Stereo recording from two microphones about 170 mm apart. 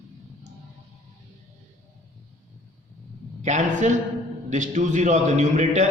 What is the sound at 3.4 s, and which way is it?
A man's voice, 45° right (ahead or behind).